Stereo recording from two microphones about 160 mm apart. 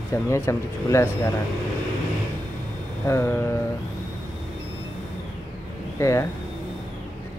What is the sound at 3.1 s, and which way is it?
Speech, 15° left (ahead or behind).